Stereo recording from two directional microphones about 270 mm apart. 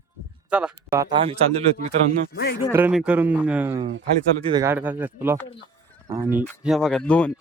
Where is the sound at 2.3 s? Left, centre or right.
Left.